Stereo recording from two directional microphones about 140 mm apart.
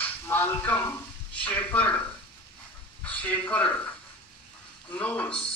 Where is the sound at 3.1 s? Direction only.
10° left (ahead or behind).